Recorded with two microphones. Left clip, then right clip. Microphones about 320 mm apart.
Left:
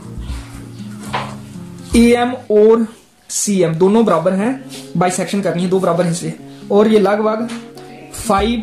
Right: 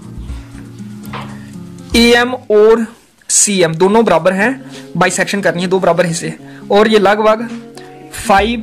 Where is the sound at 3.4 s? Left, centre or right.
Right.